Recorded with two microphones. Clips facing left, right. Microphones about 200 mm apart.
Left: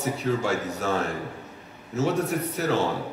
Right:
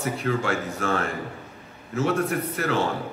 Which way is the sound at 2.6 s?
50° right (ahead or behind).